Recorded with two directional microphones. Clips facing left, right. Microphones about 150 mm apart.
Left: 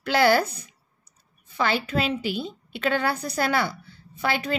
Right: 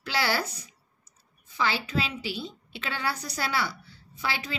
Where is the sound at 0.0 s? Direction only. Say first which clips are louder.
Left 9 dB; 50° left (ahead or behind).